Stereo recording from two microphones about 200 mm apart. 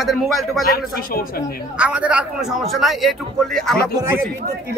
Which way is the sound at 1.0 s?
45° left (ahead or behind).